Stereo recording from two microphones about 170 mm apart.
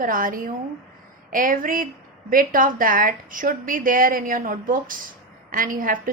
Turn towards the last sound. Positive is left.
turn(degrees=-55)  # may be behind; listen again after turning